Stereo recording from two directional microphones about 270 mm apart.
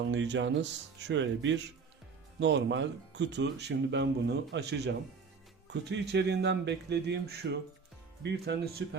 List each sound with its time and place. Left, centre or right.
0.0 s speech: right